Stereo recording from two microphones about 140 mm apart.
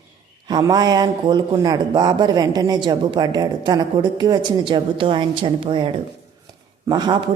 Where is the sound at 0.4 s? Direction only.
30° right (ahead or behind).